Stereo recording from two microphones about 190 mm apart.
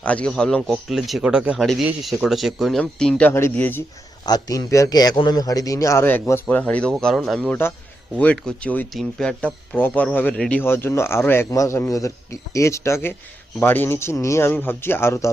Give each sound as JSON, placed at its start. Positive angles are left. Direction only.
{"t": 0.0, "sound": "a man's voice", "side_deg": 5}